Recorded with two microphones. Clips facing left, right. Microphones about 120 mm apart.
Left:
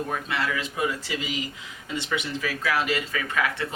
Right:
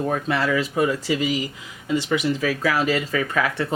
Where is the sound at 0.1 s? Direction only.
40° right (ahead or behind).